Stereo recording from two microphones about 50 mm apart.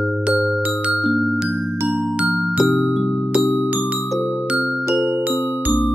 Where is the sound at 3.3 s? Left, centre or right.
Right.